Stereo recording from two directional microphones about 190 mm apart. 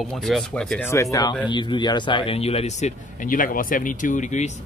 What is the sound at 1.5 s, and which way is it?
Speech, 25° left (ahead or behind).